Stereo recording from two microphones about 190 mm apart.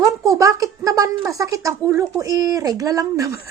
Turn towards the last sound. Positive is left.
turn(degrees=-20)  # may be behind; listen again after turning